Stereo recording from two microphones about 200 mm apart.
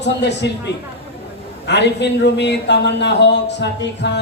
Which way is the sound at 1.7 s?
60° left (ahead or behind).